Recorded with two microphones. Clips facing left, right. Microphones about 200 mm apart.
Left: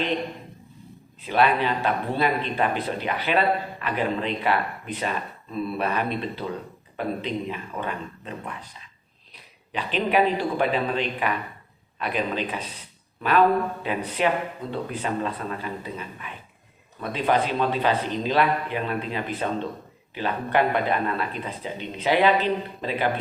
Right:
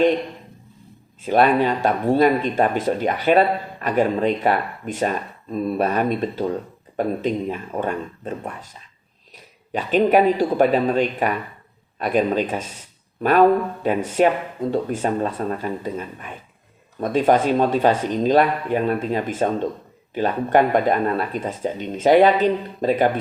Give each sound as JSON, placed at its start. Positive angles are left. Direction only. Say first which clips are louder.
{"t": 1.2, "sound": "speech", "louder": "right 5 dB", "side_deg": -45}
{"t": 13.8, "sound": "speech", "louder": "right 11 dB", "side_deg": -45}